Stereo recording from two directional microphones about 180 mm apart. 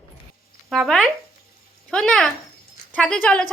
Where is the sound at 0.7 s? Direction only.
Centre (ahead or behind).